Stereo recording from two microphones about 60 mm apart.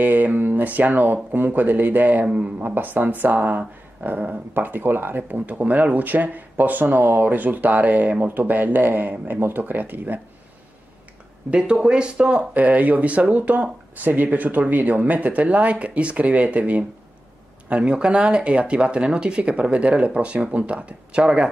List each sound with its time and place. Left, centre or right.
0.0 s speech: right
11.5 s speech: centre